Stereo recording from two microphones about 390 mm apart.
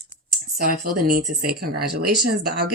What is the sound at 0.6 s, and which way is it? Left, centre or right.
Speech, right.